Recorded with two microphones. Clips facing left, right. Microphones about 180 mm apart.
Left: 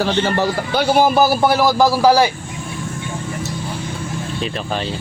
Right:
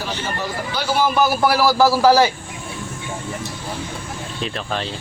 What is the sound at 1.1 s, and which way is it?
A man's voice, 30° left (ahead or behind).